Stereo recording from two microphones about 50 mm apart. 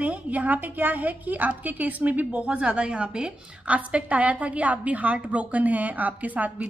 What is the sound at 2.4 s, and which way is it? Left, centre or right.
A woman's voice, right.